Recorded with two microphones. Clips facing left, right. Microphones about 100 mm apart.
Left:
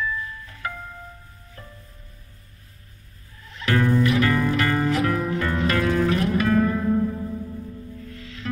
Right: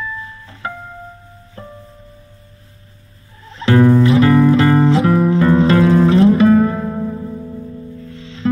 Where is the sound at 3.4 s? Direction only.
30° right (ahead or behind).